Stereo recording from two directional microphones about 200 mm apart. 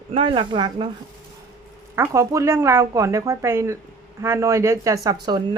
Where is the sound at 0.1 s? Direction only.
25° right (ahead or behind).